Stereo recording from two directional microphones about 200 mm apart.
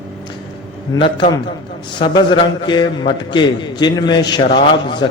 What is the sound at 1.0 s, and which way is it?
A man's voice, 25° left (ahead or behind).